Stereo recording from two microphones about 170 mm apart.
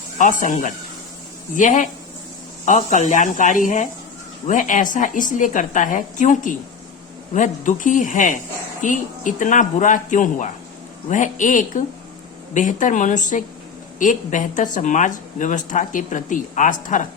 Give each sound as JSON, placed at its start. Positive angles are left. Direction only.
{"t": 0.2, "sound": "a woman's voice", "side_deg": 50}